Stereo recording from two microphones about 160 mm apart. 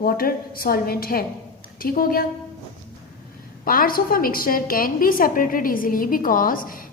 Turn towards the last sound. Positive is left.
turn(degrees=60)  # may be behind; listen again after turning